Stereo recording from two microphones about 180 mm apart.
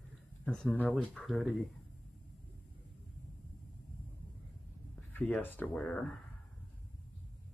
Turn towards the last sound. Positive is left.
turn(degrees=5)  # may be behind; listen again after turning